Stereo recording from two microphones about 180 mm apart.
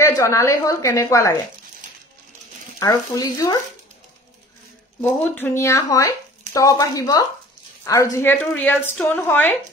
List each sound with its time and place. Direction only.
0.0 s a woman's voice: 15° left (ahead or behind)
2.8 s speech: 20° left (ahead or behind)
5.0 s a woman's voice: 10° left (ahead or behind)